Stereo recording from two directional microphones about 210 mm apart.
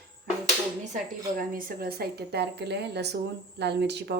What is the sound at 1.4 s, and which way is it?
A woman's voice, 40° right (ahead or behind).